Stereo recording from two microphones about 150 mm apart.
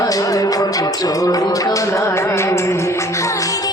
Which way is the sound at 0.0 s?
25° left (ahead or behind).